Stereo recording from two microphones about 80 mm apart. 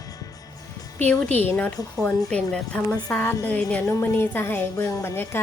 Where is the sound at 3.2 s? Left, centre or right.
Left.